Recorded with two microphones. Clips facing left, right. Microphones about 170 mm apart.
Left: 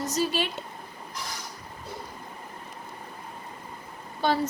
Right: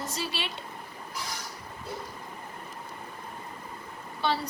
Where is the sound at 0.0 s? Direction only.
45° left (ahead or behind).